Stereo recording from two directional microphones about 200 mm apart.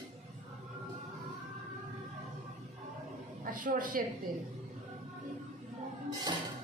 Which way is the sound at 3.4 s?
45° right (ahead or behind).